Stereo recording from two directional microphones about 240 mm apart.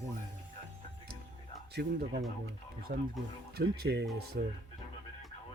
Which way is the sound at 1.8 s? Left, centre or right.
Right.